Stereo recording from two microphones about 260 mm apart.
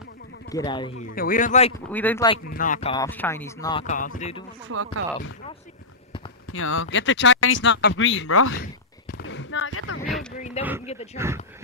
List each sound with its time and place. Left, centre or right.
0.5 s speech: centre
1.1 s a man's voice: left
1.9 s speech: centre
2.5 s a man's voice: left
2.9 s speech: centre
3.8 s speech: left
4.6 s speech: right
6.4 s speech: left
8.5 s a sound: left
9.2 s a sound: left
10.3 s oink: left
11.2 s speech: centre